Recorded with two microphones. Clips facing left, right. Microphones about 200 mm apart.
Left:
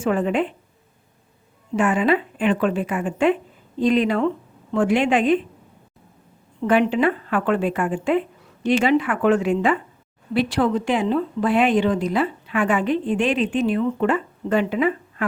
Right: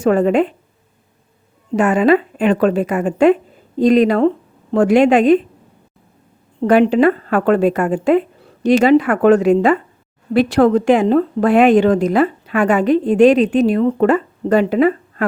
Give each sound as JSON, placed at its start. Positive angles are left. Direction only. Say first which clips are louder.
{"t": 0.0, "sound": "a woman's voice", "louder": "right 7 dB", "side_deg": -40}
{"t": 1.7, "sound": "a woman's voice", "louder": "right 6 dB", "side_deg": -40}
{"t": 6.6, "sound": "a woman's voice", "louder": "right 7 dB", "side_deg": -35}